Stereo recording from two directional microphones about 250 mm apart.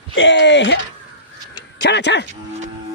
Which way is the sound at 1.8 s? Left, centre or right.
Left.